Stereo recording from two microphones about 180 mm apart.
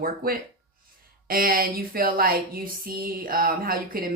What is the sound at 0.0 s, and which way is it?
Speech, 50° right (ahead or behind).